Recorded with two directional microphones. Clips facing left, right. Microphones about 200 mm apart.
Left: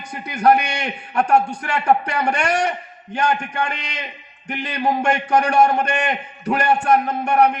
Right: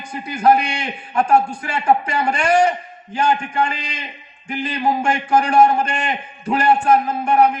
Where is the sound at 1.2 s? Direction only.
65° left (ahead or behind).